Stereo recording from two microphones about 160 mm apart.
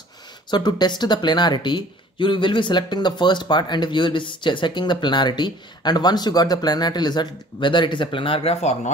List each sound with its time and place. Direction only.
0.5 s speech: 25° left (ahead or behind)